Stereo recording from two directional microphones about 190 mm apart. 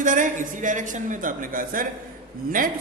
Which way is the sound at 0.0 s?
40° right (ahead or behind).